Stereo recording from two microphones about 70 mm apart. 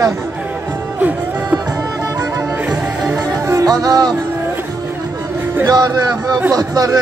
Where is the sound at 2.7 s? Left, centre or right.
Centre.